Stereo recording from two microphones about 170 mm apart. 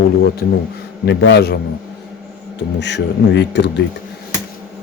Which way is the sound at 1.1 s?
75° left (ahead or behind).